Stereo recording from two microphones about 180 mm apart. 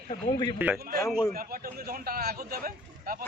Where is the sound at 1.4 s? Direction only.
55° right (ahead or behind).